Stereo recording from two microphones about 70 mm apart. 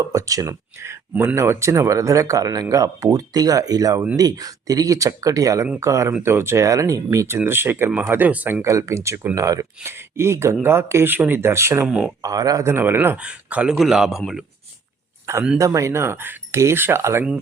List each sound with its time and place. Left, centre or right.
0.0 s speech: right
7.3 s speech: right
7.9 s speech: right
8.6 s speech: right
9.8 s speech: right
12.2 s speech: right
12.6 s speech: right
13.1 s a man's voice: centre
15.5 s speech: right
16.6 s speech: right